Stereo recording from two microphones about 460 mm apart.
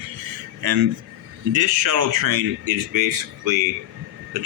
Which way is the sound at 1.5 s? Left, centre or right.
Right.